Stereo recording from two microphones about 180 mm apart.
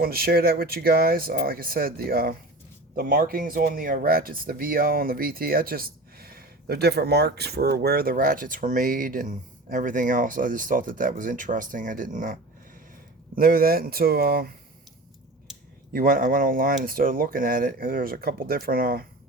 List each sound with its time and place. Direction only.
0.0 s speech: 55° right (ahead or behind)
15.9 s speech: 55° right (ahead or behind)